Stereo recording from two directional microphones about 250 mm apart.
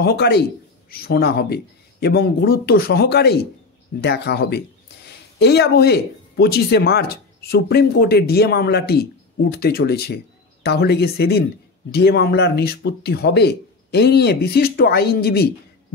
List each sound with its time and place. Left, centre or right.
0.0 s speech: left